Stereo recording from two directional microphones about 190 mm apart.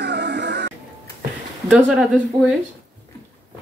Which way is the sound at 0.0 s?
60° right (ahead or behind).